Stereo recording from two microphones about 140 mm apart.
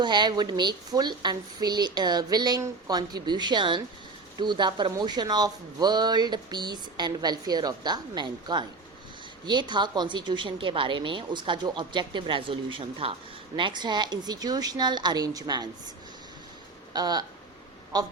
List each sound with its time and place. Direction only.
0.0 s a woman's voice: 30° right (ahead or behind)
16.9 s a woman's voice: 30° right (ahead or behind)